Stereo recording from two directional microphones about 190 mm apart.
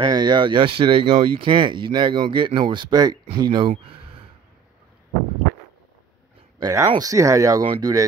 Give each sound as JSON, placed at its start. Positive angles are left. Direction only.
{"t": 0.1, "sound": "speech", "side_deg": -25}
{"t": 6.6, "sound": "speech", "side_deg": -20}